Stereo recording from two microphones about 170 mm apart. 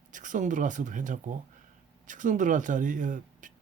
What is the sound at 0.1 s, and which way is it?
Speech, 50° right (ahead or behind).